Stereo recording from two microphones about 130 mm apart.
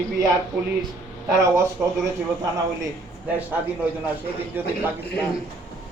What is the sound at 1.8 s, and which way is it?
Speech, centre (ahead or behind).